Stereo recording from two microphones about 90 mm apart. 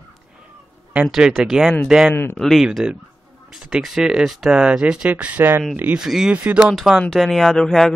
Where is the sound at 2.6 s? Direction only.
5° right (ahead or behind).